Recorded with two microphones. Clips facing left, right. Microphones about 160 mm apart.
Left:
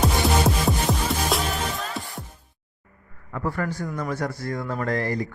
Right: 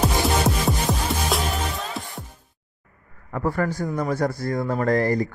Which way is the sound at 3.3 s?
40° right (ahead or behind).